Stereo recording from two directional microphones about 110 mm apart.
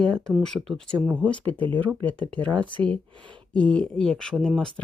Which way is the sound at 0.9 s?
15° right (ahead or behind).